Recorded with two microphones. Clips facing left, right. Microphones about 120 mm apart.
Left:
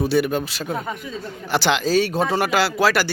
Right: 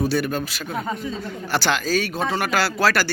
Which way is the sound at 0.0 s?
20° left (ahead or behind).